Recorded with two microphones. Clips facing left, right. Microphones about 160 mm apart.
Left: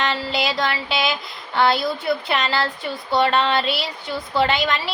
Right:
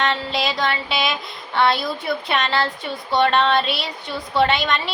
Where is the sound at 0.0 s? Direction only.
Centre (ahead or behind).